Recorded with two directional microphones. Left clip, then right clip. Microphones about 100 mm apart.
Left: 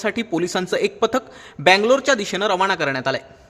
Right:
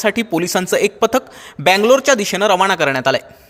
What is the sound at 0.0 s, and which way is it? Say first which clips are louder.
A man's voice: right 5 dB; 35° right (ahead or behind).